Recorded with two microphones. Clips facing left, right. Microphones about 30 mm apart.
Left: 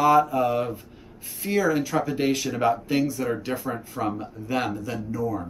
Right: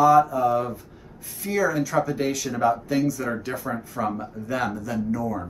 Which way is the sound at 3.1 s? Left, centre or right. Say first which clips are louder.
Left 1 dB; centre.